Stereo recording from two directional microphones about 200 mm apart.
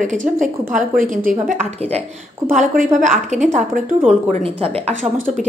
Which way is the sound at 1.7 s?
30° right (ahead or behind).